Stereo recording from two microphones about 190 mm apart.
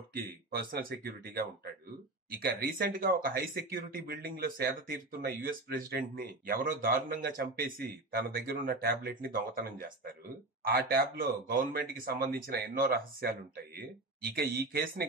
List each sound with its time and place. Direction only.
0.2 s speech: 50° right (ahead or behind)